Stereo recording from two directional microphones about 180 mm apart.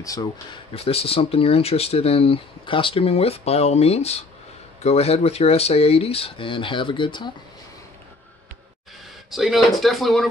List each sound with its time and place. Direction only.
0.0 s speech: 20° left (ahead or behind)
0.7 s speech: 30° left (ahead or behind)
9.3 s speech: centre (ahead or behind)